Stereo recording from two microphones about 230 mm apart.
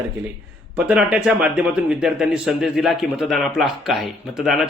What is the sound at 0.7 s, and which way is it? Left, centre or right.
Speech, centre.